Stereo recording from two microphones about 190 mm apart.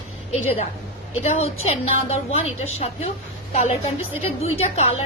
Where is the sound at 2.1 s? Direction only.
35° left (ahead or behind).